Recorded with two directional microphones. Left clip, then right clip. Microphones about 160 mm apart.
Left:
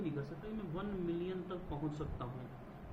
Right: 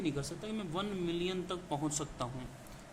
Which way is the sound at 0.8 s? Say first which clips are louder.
Right 4 dB; 90° right.